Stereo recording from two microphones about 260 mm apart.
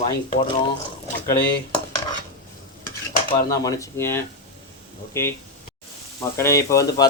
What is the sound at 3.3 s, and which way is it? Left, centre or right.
Speech, centre.